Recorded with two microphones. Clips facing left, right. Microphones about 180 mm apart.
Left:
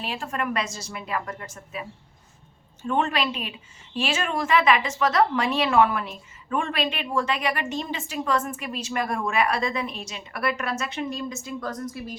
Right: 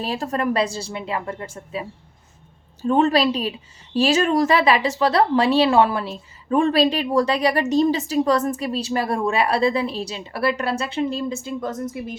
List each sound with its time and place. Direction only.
0.0 s speech: 40° right (ahead or behind)